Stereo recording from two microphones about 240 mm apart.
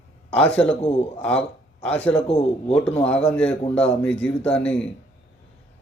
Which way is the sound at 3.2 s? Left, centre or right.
Centre.